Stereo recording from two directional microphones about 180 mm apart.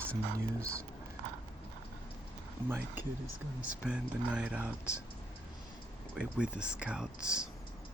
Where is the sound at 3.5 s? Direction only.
5° right (ahead or behind).